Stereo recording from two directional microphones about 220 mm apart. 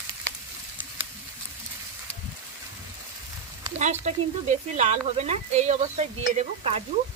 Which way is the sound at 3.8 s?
35° right (ahead or behind).